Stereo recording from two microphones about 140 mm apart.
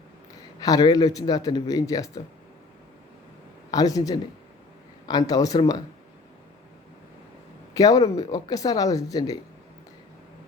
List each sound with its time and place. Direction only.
0.6 s speech: 30° left (ahead or behind)
3.7 s speech: 25° left (ahead or behind)
7.7 s speech: 25° left (ahead or behind)